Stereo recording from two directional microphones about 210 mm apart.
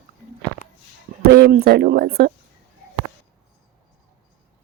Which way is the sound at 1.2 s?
45° right (ahead or behind).